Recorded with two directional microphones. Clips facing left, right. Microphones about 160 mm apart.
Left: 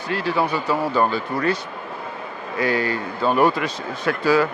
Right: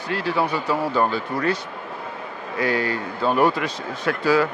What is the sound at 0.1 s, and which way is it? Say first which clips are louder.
A man's voice: left 1 dB; 15° left (ahead or behind).